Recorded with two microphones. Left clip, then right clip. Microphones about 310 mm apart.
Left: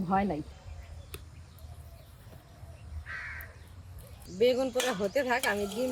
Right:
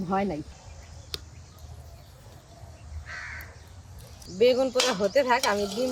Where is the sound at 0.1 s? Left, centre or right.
Centre.